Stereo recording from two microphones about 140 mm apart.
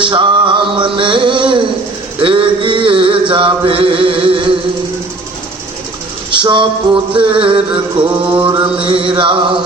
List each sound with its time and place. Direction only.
0.0 s a sound: 35° right (ahead or behind)
2.2 s chant: 40° right (ahead or behind)
6.3 s music: 35° right (ahead or behind)